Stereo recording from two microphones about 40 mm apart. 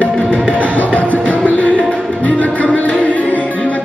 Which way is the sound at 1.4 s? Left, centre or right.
Left.